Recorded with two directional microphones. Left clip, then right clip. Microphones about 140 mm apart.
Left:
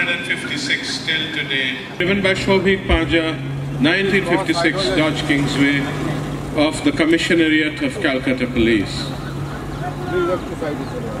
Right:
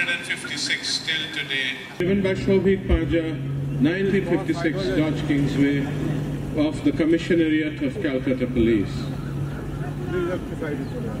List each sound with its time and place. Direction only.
0.0 s a man's voice: 15° right (ahead or behind)
2.0 s a man's voice: 35° left (ahead or behind)